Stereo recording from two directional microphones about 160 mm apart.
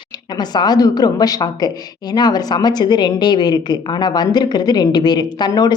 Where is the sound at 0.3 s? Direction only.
25° left (ahead or behind).